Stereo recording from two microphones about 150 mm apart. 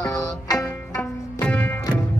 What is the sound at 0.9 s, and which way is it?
Music, 10° left (ahead or behind).